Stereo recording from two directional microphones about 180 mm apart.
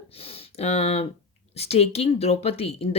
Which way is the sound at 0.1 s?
35° left (ahead or behind).